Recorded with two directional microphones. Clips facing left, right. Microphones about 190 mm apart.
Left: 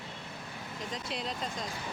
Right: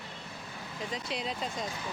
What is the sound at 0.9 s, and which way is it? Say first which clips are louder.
Speech: right 2 dB; centre (ahead or behind).